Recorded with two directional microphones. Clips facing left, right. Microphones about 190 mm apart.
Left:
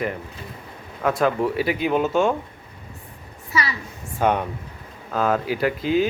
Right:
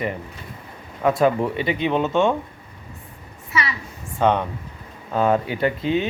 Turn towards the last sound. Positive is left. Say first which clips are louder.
# left 1 dB
turn(degrees=5)  # may be behind; listen again after turning